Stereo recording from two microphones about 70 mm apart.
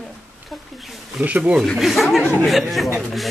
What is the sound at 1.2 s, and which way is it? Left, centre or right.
Speech, centre.